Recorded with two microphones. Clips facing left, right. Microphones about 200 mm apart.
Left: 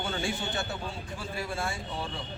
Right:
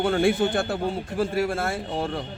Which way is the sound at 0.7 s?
80° right.